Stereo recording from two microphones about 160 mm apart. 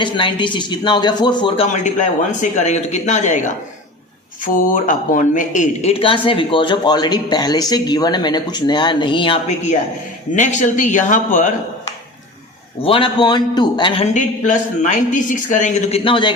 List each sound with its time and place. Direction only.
0.0 s speech: 30° left (ahead or behind)
1.7 s a man's voice: 50° left (ahead or behind); by 9.4 s 30° left (ahead or behind)
10.3 s a man's voice: 50° left (ahead or behind)
12.8 s speech: 35° left (ahead or behind)
14.0 s a man's voice: 50° left (ahead or behind)
16.0 s speech: 30° left (ahead or behind)